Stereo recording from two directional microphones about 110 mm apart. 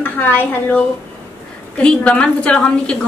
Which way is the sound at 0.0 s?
15° left (ahead or behind).